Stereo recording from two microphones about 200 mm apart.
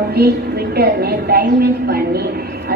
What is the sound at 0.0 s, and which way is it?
A woman's voice, 50° right (ahead or behind).